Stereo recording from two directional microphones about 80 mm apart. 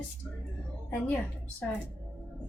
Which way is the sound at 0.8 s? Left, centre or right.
Left.